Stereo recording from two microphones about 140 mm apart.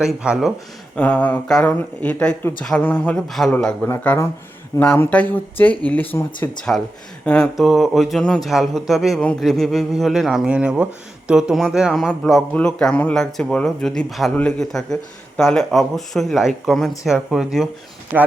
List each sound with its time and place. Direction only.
0.0 s a man's voice: 5° right (ahead or behind)
0.9 s a man's voice: 10° left (ahead or behind)
6.7 s a man's voice: 10° left (ahead or behind)
18.1 s speech: 10° right (ahead or behind)